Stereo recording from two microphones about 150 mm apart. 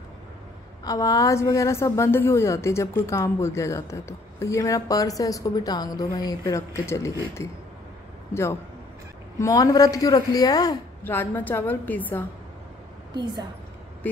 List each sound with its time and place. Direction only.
0.8 s a woman's voice: 25° left (ahead or behind)
9.4 s a woman's voice: 25° left (ahead or behind)
11.1 s a woman's voice: 15° left (ahead or behind)
13.1 s a woman's voice: 25° right (ahead or behind)